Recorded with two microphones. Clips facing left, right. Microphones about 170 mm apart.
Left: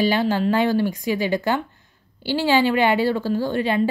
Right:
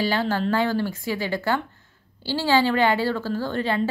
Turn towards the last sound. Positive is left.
turn(degrees=15)  # may be behind; listen again after turning